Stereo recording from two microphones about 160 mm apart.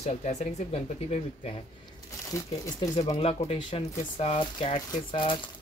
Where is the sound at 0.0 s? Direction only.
45° left (ahead or behind).